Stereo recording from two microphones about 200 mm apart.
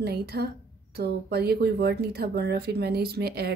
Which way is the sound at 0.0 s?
55° right (ahead or behind).